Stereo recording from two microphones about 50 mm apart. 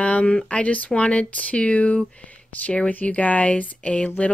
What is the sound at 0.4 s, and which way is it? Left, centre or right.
Speech, left.